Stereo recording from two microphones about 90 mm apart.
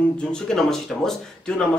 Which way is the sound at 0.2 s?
5° left (ahead or behind).